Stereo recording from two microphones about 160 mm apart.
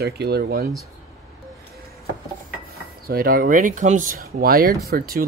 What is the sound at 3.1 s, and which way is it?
Speech, 65° right (ahead or behind).